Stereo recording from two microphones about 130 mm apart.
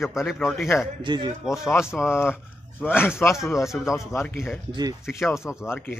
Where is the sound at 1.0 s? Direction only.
35° right (ahead or behind).